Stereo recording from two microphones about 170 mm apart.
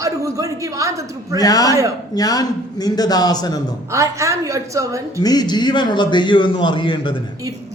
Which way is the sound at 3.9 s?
15° right (ahead or behind).